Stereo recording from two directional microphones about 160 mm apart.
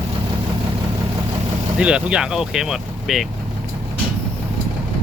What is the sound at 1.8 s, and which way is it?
Speech, 5° right (ahead or behind).